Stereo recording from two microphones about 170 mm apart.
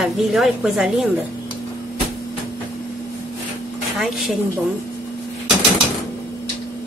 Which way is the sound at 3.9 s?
Centre (ahead or behind).